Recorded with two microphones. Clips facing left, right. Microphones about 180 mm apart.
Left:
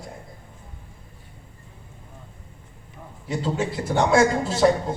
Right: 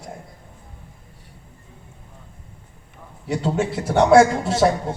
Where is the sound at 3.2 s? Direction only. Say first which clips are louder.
Right 3 dB; 70° right (ahead or behind).